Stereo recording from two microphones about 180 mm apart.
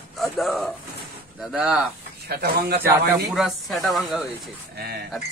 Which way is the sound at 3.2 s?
Centre (ahead or behind).